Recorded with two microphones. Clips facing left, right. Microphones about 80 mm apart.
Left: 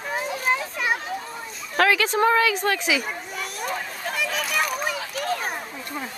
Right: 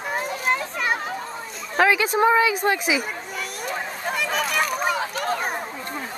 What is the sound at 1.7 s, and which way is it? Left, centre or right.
Speech, centre.